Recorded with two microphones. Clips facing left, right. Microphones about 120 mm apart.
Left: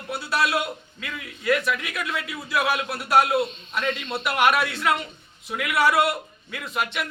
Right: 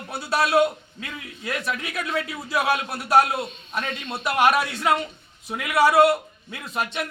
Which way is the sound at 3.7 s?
45° right (ahead or behind).